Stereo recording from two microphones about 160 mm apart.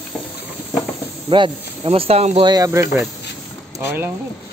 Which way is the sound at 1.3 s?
30° right (ahead or behind).